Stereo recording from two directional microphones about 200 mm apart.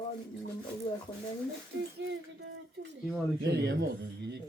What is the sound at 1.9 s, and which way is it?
A man's voice, 60° right (ahead or behind).